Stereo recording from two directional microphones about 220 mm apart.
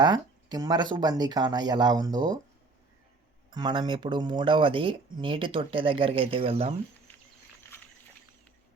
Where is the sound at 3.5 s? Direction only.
20° right (ahead or behind).